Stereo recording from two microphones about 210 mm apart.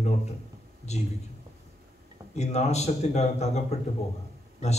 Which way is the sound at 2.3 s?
30° left (ahead or behind).